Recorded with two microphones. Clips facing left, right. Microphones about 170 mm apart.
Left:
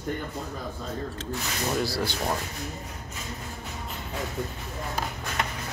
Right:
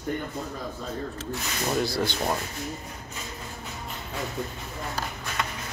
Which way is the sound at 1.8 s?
5° left (ahead or behind).